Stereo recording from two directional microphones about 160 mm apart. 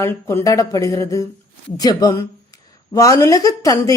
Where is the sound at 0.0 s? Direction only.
15° left (ahead or behind).